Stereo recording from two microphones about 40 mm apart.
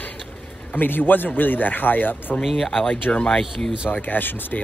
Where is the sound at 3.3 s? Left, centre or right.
Centre.